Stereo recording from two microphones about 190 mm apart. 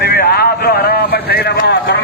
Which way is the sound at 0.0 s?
55° left (ahead or behind).